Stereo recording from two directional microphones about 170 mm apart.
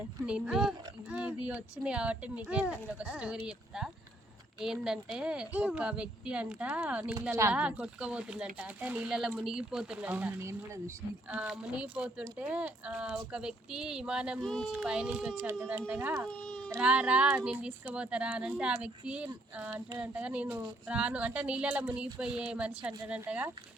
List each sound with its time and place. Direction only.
0.3 s speech: 5° right (ahead or behind)
16.2 s baby cry: 5° left (ahead or behind)
16.8 s speech: 5° right (ahead or behind)